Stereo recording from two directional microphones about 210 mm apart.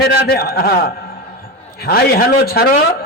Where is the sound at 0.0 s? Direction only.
50° left (ahead or behind).